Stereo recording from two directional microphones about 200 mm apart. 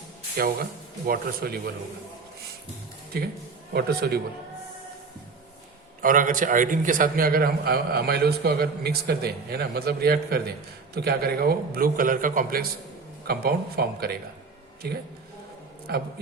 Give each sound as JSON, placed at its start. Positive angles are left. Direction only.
{"t": 0.3, "sound": "a man's voice", "side_deg": -50}
{"t": 3.7, "sound": "a man's voice", "side_deg": -55}
{"t": 6.0, "sound": "a man's voice", "side_deg": -40}
{"t": 15.9, "sound": "a man's voice", "side_deg": -50}